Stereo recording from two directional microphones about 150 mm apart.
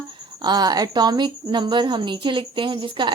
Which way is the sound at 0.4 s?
25° right (ahead or behind).